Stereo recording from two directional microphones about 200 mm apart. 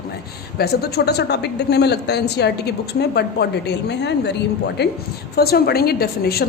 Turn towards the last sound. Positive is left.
turn(degrees=50)  # may be behind; listen again after turning